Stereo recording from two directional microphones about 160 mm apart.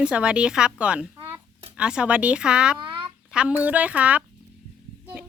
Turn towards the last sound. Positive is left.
turn(degrees=-10)  # may be behind; listen again after turning